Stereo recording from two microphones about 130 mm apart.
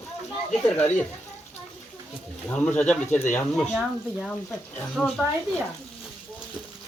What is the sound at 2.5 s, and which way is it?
Speech, 15° left (ahead or behind).